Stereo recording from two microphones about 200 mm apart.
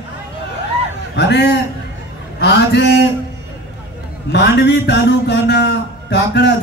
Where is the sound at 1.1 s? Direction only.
60° left (ahead or behind).